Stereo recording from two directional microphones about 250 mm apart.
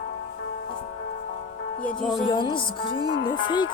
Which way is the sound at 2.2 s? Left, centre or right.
Centre.